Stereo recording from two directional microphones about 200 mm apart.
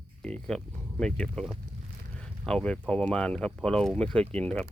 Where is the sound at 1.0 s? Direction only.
5° left (ahead or behind).